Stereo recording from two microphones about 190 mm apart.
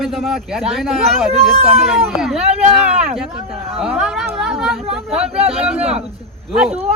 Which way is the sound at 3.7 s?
5° right (ahead or behind).